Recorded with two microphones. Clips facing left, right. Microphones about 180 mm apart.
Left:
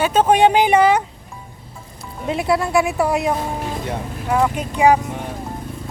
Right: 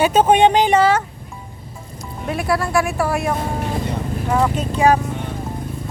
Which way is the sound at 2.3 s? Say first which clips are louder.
Left 2 dB; 20° left (ahead or behind).